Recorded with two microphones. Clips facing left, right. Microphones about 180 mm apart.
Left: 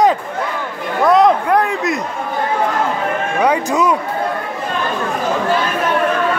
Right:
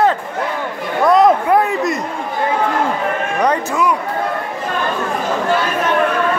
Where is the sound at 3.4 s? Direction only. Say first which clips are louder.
Left 2 dB; 10° left (ahead or behind).